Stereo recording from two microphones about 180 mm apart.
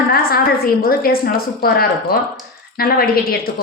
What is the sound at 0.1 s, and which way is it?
A woman's voice, 55° left (ahead or behind).